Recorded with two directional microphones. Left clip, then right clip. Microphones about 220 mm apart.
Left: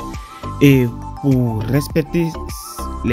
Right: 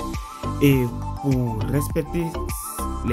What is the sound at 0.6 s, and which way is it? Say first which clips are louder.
Speech: left 7 dB; 20° left (ahead or behind).